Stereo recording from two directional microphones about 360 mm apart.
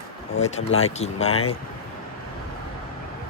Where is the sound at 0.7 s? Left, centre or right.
Left.